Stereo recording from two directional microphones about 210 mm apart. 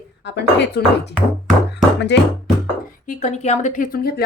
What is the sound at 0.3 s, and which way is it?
Speech, 55° left (ahead or behind).